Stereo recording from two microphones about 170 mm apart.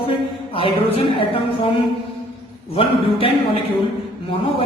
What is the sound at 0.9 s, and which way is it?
Speech, 35° left (ahead or behind).